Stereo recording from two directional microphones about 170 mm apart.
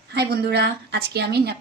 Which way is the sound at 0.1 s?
75° right (ahead or behind).